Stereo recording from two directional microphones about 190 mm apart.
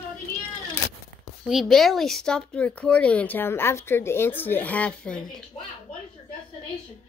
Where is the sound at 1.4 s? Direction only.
Centre (ahead or behind).